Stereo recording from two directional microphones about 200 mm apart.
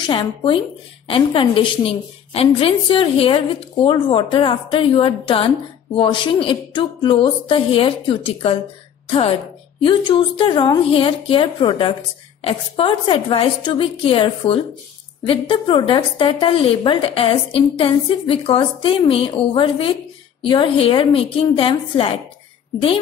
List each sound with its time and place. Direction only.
0.0 s a woman's voice: 25° left (ahead or behind)
9.8 s a woman's voice: 25° left (ahead or behind)